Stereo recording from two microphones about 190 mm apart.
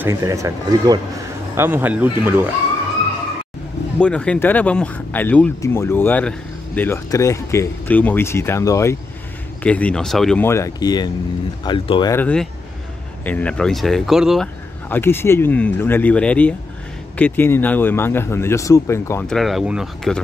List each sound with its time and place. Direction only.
0.0 s speech: 15° right (ahead or behind)
4.0 s speech: 5° left (ahead or behind); by 12.2 s 25° left (ahead or behind)
12.2 s speech: 5° left (ahead or behind)
14.9 s speech: 10° left (ahead or behind)
19.2 s speech: centre (ahead or behind)